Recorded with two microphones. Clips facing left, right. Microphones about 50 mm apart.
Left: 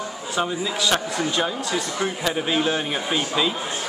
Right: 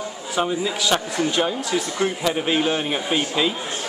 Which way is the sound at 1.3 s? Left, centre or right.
Centre.